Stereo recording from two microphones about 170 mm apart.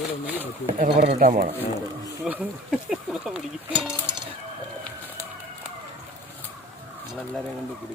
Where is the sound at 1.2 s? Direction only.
55° right (ahead or behind).